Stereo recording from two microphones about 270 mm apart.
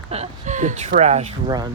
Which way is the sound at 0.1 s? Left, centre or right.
Right.